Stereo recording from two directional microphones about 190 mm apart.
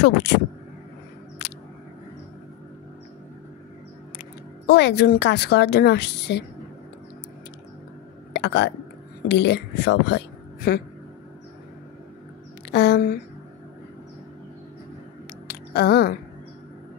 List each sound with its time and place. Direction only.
0.0 s a woman's voice: 65° left (ahead or behind)
4.6 s a woman's voice: 60° left (ahead or behind)
8.3 s a sound: 65° left (ahead or behind)
9.3 s speech: 65° left (ahead or behind)
12.7 s speech: 60° left (ahead or behind)
15.4 s a sound: 55° left (ahead or behind)